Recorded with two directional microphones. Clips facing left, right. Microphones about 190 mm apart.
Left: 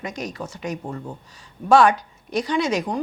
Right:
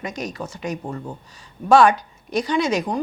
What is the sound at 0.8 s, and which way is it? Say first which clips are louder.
Speech: right 1 dB; 30° right (ahead or behind).